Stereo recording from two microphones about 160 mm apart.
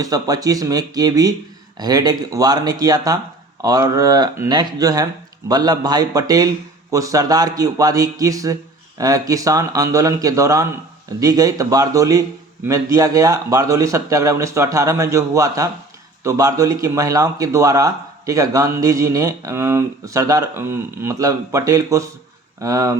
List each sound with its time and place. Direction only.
0.0 s speech: 20° right (ahead or behind)